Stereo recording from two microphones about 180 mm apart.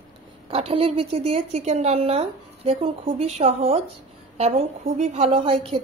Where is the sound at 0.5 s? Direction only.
35° right (ahead or behind).